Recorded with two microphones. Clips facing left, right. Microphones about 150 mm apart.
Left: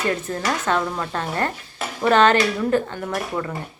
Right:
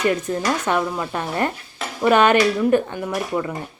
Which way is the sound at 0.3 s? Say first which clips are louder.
Right 2 dB; 15° right (ahead or behind).